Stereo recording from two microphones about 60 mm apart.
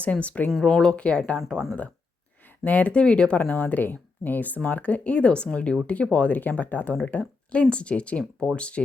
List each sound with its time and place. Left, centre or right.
0.0 s speech: left
0.6 s speech: centre
1.4 s speech: centre
2.6 s speech: left